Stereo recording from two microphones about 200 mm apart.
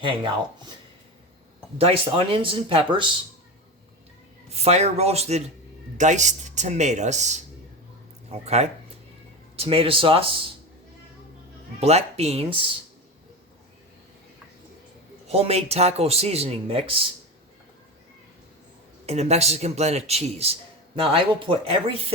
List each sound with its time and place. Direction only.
1.8 s speech: 30° right (ahead or behind)
4.4 s a man's voice: 30° right (ahead or behind)
11.8 s a man's voice: 30° right (ahead or behind)
15.3 s a man's voice: 30° right (ahead or behind)
19.0 s a man's voice: 35° right (ahead or behind)